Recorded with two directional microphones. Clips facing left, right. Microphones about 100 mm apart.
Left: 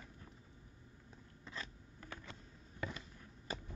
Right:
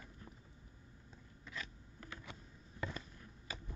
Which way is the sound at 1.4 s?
35° left (ahead or behind).